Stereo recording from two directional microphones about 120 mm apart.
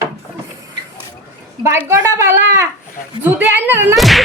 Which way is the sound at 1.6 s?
25° right (ahead or behind).